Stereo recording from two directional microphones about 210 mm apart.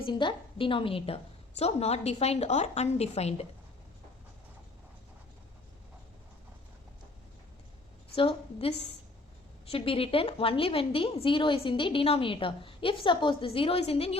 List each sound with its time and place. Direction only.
0.0 s a woman's voice: 20° left (ahead or behind)
8.1 s a woman's voice: 25° left (ahead or behind)